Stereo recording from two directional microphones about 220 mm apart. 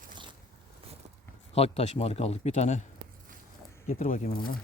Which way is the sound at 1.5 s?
25° left (ahead or behind).